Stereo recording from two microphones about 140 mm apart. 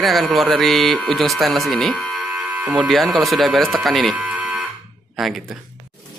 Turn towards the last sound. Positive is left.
turn(degrees=0)  # may be behind; listen again after turning